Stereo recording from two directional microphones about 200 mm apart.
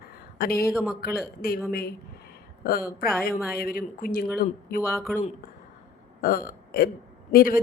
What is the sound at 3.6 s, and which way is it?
Speech, 45° left (ahead or behind).